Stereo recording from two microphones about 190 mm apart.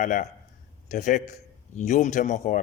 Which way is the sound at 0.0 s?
40° left (ahead or behind).